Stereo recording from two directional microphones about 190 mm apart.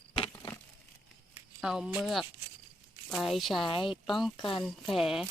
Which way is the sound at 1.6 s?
5° right (ahead or behind).